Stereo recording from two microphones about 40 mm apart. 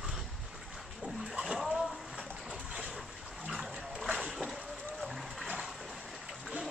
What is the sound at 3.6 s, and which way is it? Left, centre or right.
Dog, centre.